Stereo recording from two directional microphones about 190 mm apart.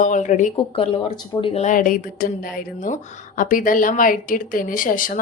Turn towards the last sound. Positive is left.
turn(degrees=45)  # may be behind; listen again after turning